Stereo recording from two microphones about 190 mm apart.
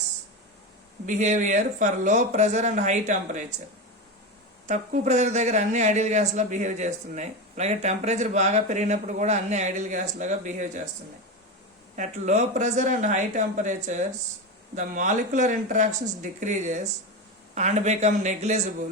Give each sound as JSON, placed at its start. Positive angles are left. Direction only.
{"t": 1.0, "sound": "a man's voice", "side_deg": -40}
{"t": 4.7, "sound": "a man's voice", "side_deg": -40}
{"t": 11.9, "sound": "a man's voice", "side_deg": -40}